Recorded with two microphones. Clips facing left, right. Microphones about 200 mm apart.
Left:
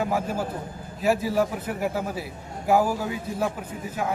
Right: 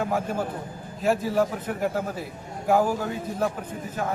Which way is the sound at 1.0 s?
5° left (ahead or behind).